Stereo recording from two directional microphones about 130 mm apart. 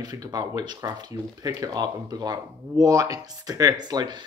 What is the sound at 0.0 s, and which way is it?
Speech, 30° right (ahead or behind).